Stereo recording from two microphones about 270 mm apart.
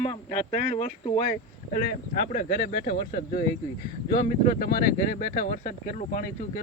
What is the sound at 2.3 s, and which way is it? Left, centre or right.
Speech, left.